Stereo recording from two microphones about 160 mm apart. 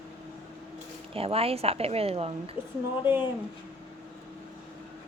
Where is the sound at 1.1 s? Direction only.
35° right (ahead or behind).